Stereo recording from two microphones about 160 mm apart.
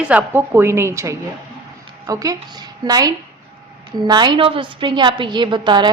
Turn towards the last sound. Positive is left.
turn(degrees=-30)  # may be behind; listen again after turning